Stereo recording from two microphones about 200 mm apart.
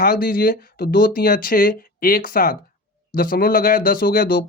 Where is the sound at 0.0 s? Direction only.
45° left (ahead or behind).